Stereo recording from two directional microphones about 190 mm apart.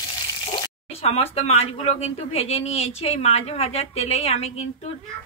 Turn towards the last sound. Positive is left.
turn(degrees=35)  # may be behind; listen again after turning